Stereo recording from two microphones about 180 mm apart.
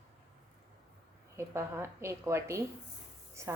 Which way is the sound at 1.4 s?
15° right (ahead or behind).